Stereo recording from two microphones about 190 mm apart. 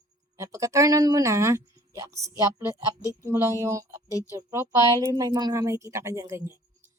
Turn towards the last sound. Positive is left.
turn(degrees=-15)  # may be behind; listen again after turning